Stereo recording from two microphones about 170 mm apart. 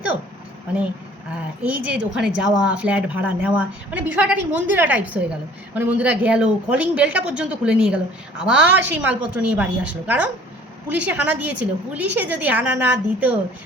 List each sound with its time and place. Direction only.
1.6 s speech: 10° right (ahead or behind)